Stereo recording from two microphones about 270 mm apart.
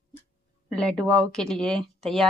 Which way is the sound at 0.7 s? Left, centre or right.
Centre.